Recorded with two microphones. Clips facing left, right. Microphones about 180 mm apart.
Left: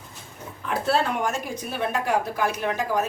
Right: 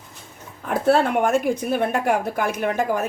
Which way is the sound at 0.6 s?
50° right (ahead or behind).